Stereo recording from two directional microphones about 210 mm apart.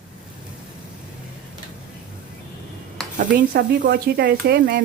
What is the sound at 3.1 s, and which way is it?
Speech, 40° right (ahead or behind).